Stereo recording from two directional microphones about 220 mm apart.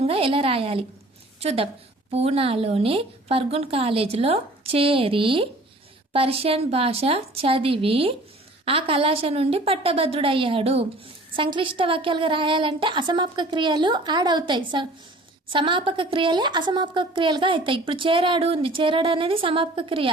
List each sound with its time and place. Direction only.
0.0 s a woman's voice: 25° right (ahead or behind)